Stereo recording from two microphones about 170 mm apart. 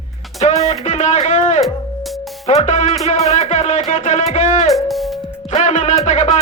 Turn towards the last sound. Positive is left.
turn(degrees=45)  # may be behind; listen again after turning